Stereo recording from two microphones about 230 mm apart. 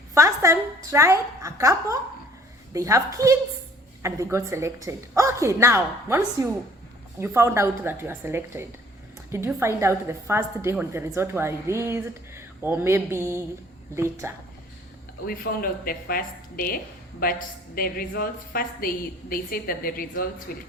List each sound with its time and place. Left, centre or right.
0.1 s a woman's voice: centre
15.3 s a woman's voice: left